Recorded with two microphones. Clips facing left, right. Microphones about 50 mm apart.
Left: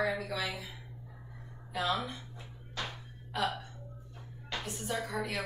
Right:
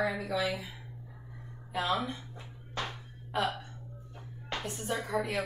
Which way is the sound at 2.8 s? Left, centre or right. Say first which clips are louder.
Right 3 dB; right.